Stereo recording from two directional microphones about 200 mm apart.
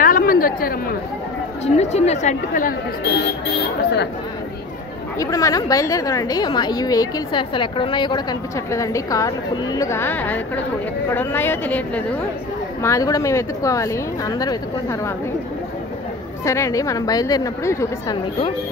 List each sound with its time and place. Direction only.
0.0 s chatter: 45° left (ahead or behind)
1.8 s a woman's voice: 35° left (ahead or behind)
3.0 s speech: 60° left (ahead or behind)
5.2 s a woman's voice: 15° left (ahead or behind)
16.4 s a woman's voice: 15° left (ahead or behind)